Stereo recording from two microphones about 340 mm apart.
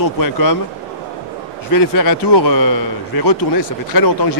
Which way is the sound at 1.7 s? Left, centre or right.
Left.